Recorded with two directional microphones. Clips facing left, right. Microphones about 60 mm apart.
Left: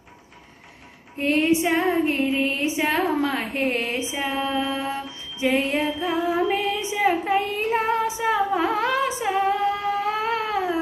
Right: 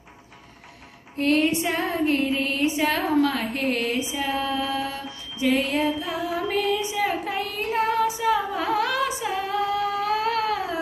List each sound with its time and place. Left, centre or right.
1.2 s music: centre